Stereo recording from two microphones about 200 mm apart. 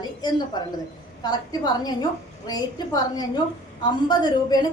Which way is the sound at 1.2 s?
20° left (ahead or behind).